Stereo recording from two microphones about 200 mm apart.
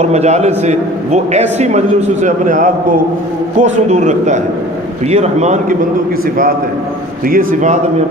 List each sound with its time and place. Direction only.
0.0 s a man's voice: 35° right (ahead or behind)
7.3 s a man's voice: 40° right (ahead or behind)